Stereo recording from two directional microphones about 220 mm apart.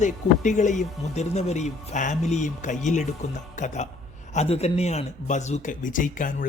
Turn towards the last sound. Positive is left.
turn(degrees=35)  # may be behind; listen again after turning